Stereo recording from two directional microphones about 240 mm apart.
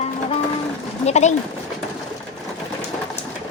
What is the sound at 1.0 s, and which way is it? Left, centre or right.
Speech, left.